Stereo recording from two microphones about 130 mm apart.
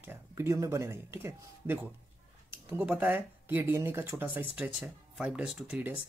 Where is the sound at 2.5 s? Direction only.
20° right (ahead or behind).